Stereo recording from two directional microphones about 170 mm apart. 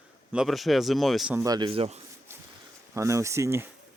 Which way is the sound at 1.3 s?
20° right (ahead or behind).